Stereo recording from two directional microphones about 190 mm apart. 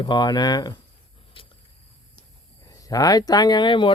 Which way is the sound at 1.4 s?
30° left (ahead or behind).